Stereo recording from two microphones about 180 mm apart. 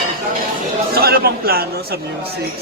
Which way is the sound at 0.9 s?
60° right (ahead or behind).